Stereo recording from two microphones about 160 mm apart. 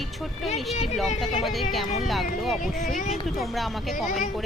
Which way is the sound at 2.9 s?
55° left (ahead or behind).